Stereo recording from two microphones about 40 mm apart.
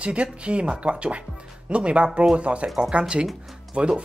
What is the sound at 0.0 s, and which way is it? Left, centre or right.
Speech, right.